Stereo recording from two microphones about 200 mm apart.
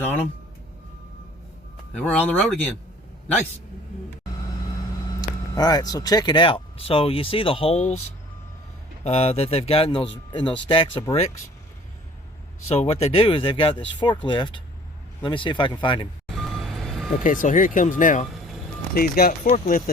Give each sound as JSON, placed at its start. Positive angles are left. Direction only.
{"t": 2.0, "sound": "speech", "side_deg": 5}
{"t": 5.2, "sound": "speech", "side_deg": 20}
{"t": 9.0, "sound": "speech", "side_deg": 30}
{"t": 12.6, "sound": "speech", "side_deg": 30}
{"t": 16.3, "sound": "vehicle", "side_deg": 0}
{"t": 17.2, "sound": "speech", "side_deg": 40}